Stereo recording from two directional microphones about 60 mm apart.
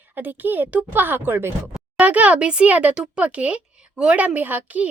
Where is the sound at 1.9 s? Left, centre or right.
Right.